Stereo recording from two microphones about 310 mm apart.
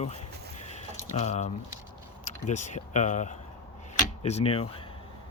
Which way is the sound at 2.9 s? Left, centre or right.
Left.